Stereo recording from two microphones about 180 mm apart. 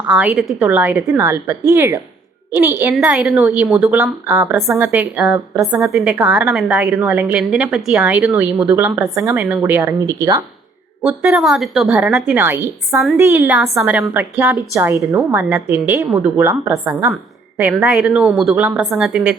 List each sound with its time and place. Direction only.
0.1 s a woman's voice: 5° right (ahead or behind)
11.0 s a woman's voice: 5° right (ahead or behind)